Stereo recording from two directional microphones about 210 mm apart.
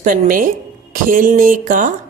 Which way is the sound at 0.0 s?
40° right (ahead or behind).